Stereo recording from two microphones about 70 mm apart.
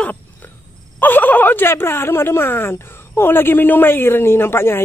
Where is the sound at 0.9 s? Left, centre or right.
Left.